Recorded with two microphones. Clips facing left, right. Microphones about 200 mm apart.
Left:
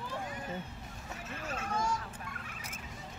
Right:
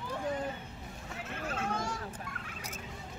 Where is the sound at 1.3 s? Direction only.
55° right (ahead or behind).